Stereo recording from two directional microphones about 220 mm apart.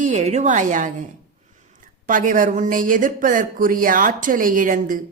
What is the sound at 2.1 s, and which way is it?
Speech, 35° right (ahead or behind).